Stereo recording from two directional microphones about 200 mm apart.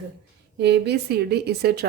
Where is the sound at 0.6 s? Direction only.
55° right (ahead or behind).